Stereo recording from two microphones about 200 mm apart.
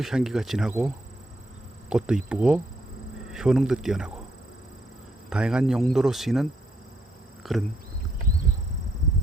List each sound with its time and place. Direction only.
0.0 s speech: 5° right (ahead or behind)
1.9 s speech: 5° right (ahead or behind)
5.3 s speech: 5° right (ahead or behind)